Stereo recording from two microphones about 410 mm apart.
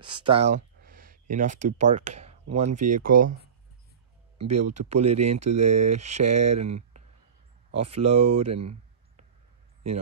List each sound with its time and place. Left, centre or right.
0.1 s a sound: centre
1.3 s speech: centre
4.4 s speech: right
4.7 s speech: centre
5.1 s speech: right
5.4 s speech: centre
8.4 s a sound: centre